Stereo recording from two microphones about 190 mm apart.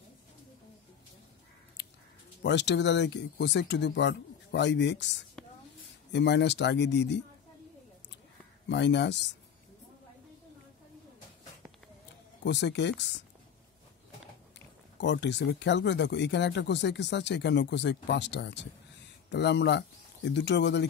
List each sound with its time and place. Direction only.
2.4 s speech: 65° left (ahead or behind)
5.4 s a sound: 5° left (ahead or behind)
6.1 s speech: 65° left (ahead or behind)
8.6 s speech: 65° left (ahead or behind)
12.4 s speech: 65° left (ahead or behind)
15.0 s speech: 65° left (ahead or behind)